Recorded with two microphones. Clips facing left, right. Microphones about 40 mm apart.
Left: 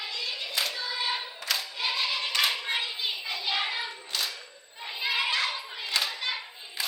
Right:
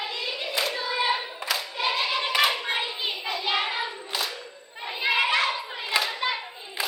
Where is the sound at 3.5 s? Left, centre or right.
Centre.